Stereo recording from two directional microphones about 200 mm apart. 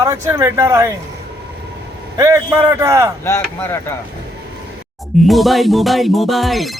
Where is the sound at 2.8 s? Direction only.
15° right (ahead or behind).